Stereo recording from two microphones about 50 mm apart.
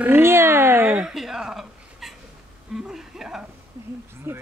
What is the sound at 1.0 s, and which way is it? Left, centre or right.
Speech, centre.